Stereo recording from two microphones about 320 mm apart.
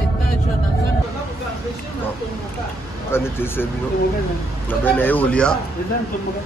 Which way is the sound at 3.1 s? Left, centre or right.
Centre.